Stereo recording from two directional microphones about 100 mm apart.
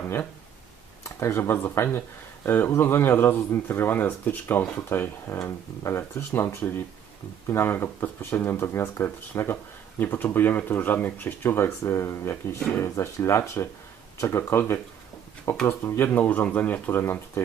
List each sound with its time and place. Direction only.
1.0 s speech: 25° left (ahead or behind)